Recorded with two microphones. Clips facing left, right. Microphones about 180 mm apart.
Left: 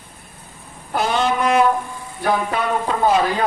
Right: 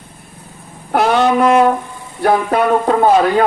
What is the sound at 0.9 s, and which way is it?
Brass instrument, 60° right (ahead or behind).